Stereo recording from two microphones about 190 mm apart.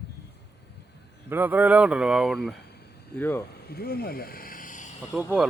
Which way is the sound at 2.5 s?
60° left (ahead or behind).